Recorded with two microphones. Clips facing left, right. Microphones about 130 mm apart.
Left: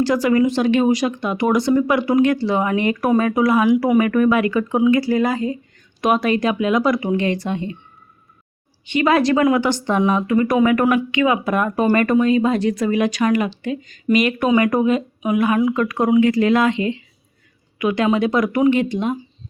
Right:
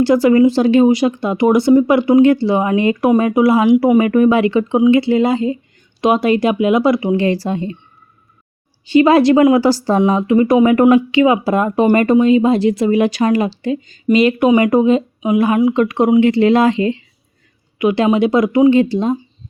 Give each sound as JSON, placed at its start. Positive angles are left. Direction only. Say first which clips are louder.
{"t": 0.0, "sound": "speech", "louder": "right 6 dB", "side_deg": -25}
{"t": 8.9, "sound": "a woman's voice", "louder": "right 6 dB", "side_deg": -30}
{"t": 10.0, "sound": "speech", "louder": "right 3 dB", "side_deg": -25}